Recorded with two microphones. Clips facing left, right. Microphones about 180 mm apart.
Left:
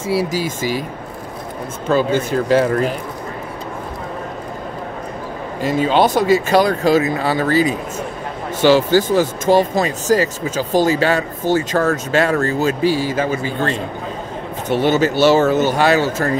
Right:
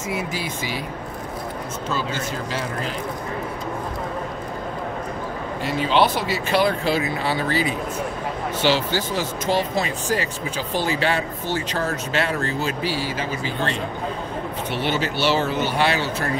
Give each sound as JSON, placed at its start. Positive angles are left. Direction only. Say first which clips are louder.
{"t": 0.0, "sound": "speech", "louder": "left 8 dB", "side_deg": 35}
{"t": 1.9, "sound": "speech", "louder": "left 12 dB", "side_deg": 55}
{"t": 5.6, "sound": "speech", "louder": "left 5 dB", "side_deg": 45}